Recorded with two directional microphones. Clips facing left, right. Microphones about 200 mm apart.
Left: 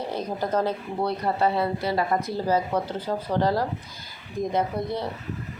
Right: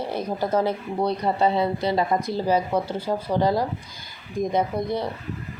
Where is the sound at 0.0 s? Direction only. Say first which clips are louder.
Right 2 dB; 10° right (ahead or behind).